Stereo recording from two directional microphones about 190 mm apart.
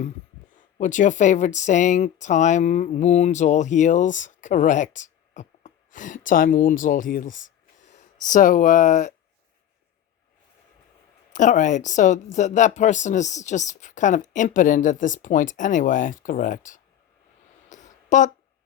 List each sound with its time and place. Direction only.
0.5 s speech: 40° left (ahead or behind)
11.3 s speech: 40° left (ahead or behind)
17.7 s a sound: 40° left (ahead or behind)